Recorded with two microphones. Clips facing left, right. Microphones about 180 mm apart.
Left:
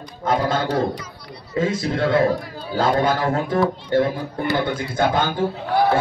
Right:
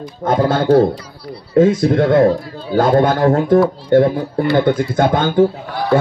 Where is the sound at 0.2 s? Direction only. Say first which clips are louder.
Right 5 dB; 50° right (ahead or behind).